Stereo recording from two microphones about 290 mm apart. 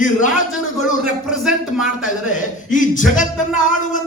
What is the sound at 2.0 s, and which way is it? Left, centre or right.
A man's voice, left.